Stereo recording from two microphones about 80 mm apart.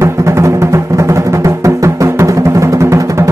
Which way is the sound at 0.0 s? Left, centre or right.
Right.